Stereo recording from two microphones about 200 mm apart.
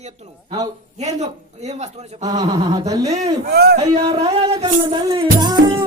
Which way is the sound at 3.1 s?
30° right (ahead or behind).